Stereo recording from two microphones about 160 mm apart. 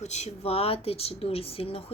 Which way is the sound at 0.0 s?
45° left (ahead or behind).